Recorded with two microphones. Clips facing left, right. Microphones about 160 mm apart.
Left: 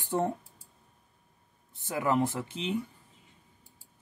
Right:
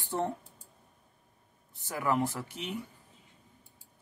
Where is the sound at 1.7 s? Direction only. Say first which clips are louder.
Left 2 dB; 20° left (ahead or behind).